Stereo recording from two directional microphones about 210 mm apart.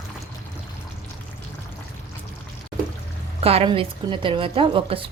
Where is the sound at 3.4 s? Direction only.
25° right (ahead or behind).